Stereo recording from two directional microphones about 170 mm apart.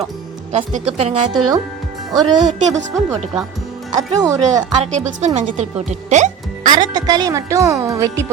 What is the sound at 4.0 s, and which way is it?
Speech, 20° right (ahead or behind).